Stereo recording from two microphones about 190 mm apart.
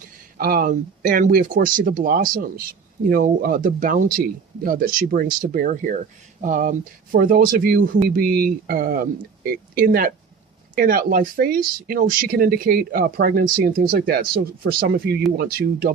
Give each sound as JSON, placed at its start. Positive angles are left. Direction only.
{"t": 0.3, "sound": "speech", "side_deg": -50}